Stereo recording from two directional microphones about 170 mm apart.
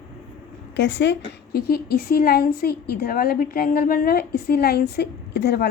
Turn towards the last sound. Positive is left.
turn(degrees=75)  # may be behind; listen again after turning